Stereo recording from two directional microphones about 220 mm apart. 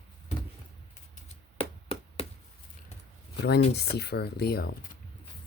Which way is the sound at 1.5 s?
25° left (ahead or behind).